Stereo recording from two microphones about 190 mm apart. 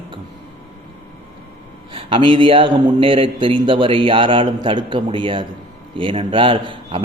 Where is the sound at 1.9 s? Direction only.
25° right (ahead or behind).